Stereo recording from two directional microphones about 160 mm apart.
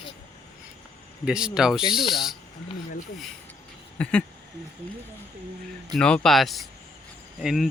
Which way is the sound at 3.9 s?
5° left (ahead or behind).